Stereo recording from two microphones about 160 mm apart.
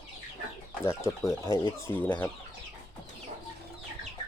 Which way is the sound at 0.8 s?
15° left (ahead or behind).